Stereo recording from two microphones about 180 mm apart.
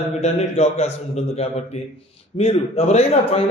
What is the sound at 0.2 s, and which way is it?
A man's voice, 35° left (ahead or behind).